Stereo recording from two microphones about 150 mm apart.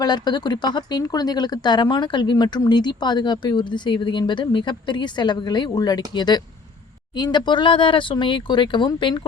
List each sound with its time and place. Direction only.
0.0 s speech: 30° left (ahead or behind)